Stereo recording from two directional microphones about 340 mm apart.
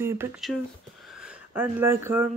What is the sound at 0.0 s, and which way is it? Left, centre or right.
Speech, centre.